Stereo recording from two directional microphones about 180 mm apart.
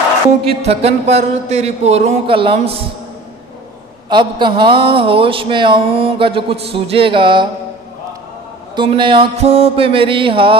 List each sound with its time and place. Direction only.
0.5 s speech: 35° right (ahead or behind)
4.1 s speech: 25° right (ahead or behind)
8.7 s speech: 25° right (ahead or behind)